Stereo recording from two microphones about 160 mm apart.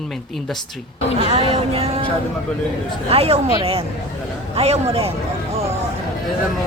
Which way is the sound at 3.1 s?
40° right (ahead or behind).